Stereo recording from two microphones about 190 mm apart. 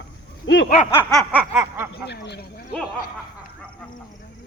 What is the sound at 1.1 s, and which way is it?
Speech, centre (ahead or behind).